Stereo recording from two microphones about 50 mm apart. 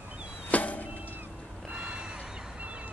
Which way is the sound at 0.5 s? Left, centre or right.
Left.